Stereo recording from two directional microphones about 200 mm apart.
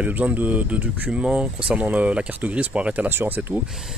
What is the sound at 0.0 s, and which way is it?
Speech, 10° right (ahead or behind).